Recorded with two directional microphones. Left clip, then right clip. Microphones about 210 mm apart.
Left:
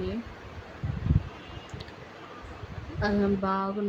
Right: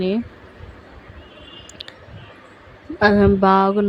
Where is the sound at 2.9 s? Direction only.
40° right (ahead or behind).